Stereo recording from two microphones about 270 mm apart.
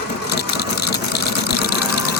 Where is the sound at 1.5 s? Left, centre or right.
Left.